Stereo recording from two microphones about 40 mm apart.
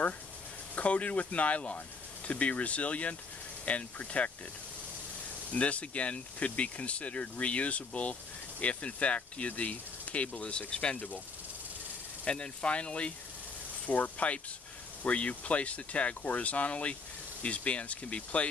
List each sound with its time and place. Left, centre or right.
0.7 s speech: left
5.5 s speech: left
12.3 s speech: left
13.8 s speech: left